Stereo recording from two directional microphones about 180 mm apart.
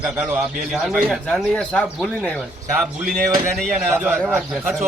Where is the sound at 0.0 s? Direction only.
5° right (ahead or behind).